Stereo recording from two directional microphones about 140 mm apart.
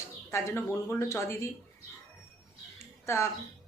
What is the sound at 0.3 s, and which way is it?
A woman's voice, 20° left (ahead or behind).